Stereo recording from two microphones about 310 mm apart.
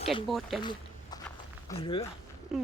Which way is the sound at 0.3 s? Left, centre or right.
Centre.